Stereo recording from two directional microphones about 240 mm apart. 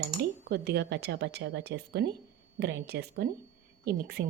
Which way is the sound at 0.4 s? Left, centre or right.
Right.